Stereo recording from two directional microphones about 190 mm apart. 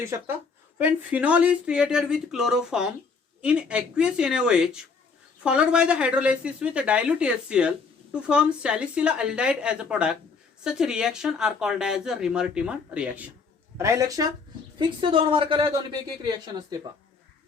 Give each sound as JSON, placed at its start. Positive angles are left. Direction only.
{"t": 0.0, "sound": "speech", "side_deg": -15}
{"t": 14.8, "sound": "a woman's voice", "side_deg": -25}